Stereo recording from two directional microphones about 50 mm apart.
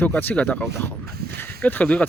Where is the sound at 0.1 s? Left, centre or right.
Left.